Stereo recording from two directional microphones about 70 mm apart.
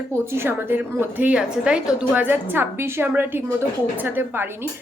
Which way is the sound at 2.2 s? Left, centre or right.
Right.